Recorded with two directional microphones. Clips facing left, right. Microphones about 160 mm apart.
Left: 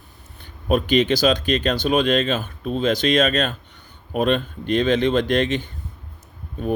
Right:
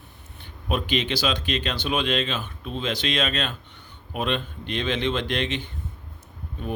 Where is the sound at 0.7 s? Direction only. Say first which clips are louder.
Left 8 dB; 45° left (ahead or behind).